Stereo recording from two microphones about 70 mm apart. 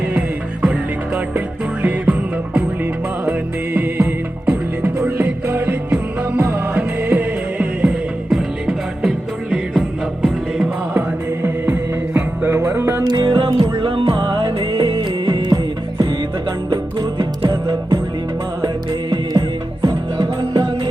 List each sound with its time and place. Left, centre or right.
0.6 s music: centre
3.8 s music: right
8.3 s music: centre
11.4 s music: right
13.1 s music: right
16.6 s music: right
19.8 s music: right